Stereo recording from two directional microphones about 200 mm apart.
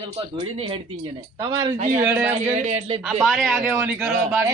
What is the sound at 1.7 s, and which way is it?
Speech, 40° right (ahead or behind).